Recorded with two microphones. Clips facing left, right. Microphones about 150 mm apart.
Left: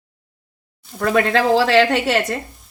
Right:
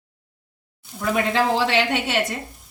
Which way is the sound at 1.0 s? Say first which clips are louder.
Left 4 dB; 85° left.